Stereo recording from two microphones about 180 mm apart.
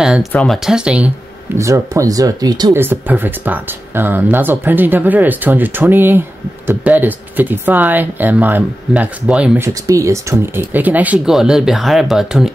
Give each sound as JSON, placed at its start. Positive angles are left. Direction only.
{"t": 0.0, "sound": "speech", "side_deg": -5}
{"t": 1.6, "sound": "speech", "side_deg": -15}
{"t": 2.8, "sound": "speech", "side_deg": -10}
{"t": 9.8, "sound": "speech", "side_deg": -15}